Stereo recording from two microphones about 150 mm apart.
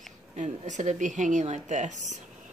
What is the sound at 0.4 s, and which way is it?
A woman's voice, 55° right (ahead or behind).